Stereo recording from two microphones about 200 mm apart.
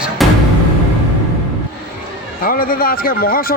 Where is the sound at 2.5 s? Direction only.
45° left (ahead or behind).